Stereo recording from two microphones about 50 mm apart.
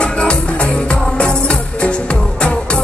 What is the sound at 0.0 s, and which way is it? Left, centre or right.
Music, left.